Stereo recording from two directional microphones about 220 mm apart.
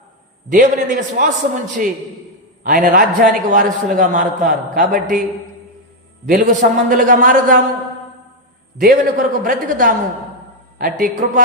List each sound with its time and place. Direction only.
0.5 s a man's voice: 40° right (ahead or behind)
2.6 s a man's voice: 40° right (ahead or behind)
6.2 s a man's voice: 35° right (ahead or behind)
8.8 s a man's voice: 40° right (ahead or behind)